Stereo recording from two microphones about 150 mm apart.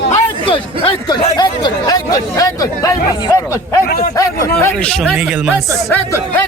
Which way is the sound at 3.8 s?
75° left (ahead or behind).